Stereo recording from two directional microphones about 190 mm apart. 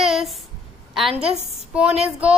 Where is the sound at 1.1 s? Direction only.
30° right (ahead or behind).